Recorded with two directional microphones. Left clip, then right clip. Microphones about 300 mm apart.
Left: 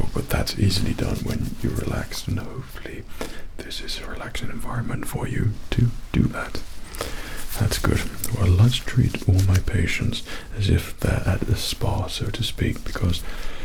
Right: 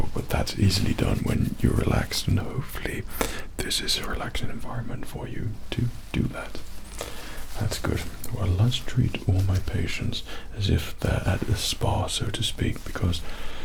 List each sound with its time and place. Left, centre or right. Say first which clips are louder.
0.1 s a sound: left 2 dB; centre
0.4 s speech: left 2 dB; centre
1.8 s speech: right 3 dB; right
2.8 s speech: right 5 dB; right
3.6 s speech: right 6 dB; right
4.9 s speech: left 6 dB; left
7.6 s speech: left 5 dB; left; by 13.2 s centre